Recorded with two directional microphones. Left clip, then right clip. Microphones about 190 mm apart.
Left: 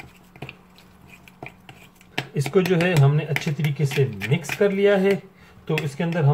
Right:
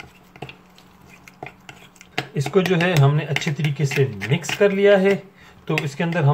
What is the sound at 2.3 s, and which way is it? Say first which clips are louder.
Speech: right 1 dB; centre (ahead or behind).